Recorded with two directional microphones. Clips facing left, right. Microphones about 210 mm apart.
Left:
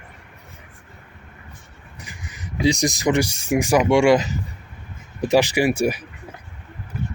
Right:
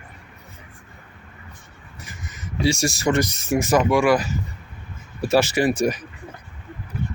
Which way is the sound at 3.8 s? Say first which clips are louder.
Left 3 dB; 25° left (ahead or behind).